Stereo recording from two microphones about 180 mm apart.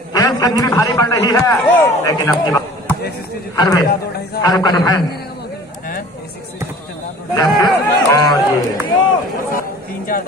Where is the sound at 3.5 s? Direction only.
20° left (ahead or behind).